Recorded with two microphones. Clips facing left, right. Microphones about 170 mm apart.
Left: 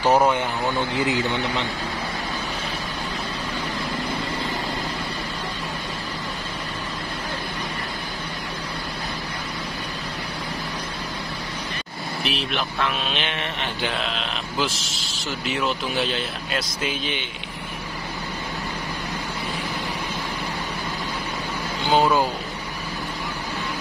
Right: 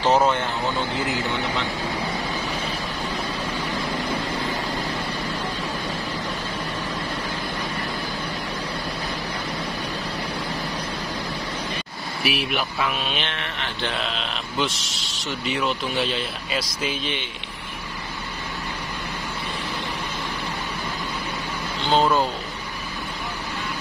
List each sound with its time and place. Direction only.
0.0 s a man's voice: 10° left (ahead or behind)
12.2 s a man's voice: 10° right (ahead or behind)
21.8 s speech: 10° left (ahead or behind)